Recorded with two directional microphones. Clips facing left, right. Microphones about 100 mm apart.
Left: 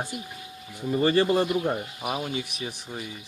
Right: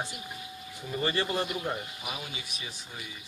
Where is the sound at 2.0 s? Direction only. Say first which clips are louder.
Left 9 dB; 45° left (ahead or behind).